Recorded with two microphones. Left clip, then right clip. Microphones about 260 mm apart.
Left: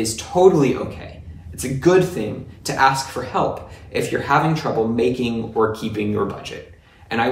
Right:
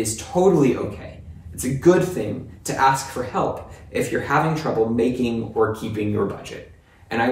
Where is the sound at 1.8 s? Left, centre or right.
Centre.